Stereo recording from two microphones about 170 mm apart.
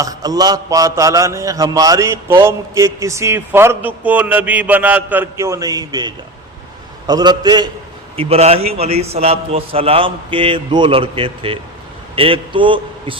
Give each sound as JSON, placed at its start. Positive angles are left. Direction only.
{"t": 0.0, "sound": "a man's voice", "side_deg": -20}
{"t": 8.1, "sound": "a man's voice", "side_deg": -35}